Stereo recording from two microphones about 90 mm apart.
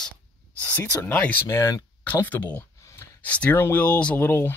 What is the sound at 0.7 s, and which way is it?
Speech, 20° left (ahead or behind).